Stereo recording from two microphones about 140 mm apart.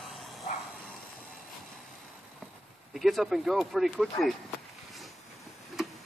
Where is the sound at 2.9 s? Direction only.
Centre (ahead or behind).